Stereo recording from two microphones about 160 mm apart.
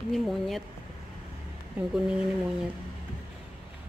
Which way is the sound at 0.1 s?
Centre (ahead or behind).